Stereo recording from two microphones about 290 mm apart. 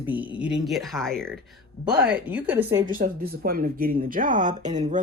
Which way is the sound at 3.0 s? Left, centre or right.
Right.